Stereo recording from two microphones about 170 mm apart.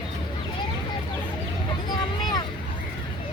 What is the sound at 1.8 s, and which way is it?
Vehicle, 25° left (ahead or behind).